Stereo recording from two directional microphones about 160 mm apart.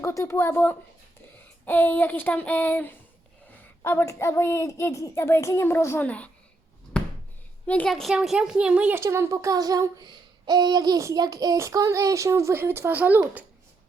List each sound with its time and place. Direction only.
0.0 s a woman's voice: 20° left (ahead or behind)
6.9 s a sound: 5° left (ahead or behind)
7.7 s a woman's voice: 5° left (ahead or behind); by 13.4 s 10° right (ahead or behind)